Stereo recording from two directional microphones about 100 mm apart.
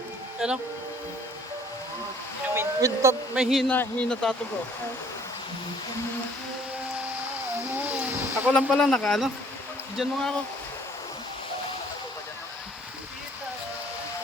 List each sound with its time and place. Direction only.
0.3 s speech: 10° right (ahead or behind)
2.6 s a sound: 25° right (ahead or behind)
3.3 s speech: centre (ahead or behind)
3.7 s speech: 15° left (ahead or behind)
7.9 s a sound: 15° right (ahead or behind)
8.7 s speech: 10° left (ahead or behind)